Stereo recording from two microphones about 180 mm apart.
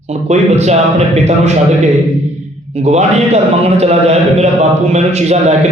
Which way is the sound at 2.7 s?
40° right (ahead or behind).